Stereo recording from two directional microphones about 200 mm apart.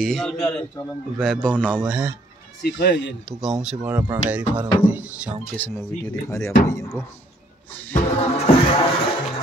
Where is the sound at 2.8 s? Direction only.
55° left (ahead or behind).